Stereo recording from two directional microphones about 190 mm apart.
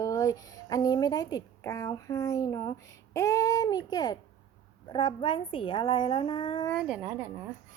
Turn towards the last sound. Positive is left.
turn(degrees=-10)  # may be behind; listen again after turning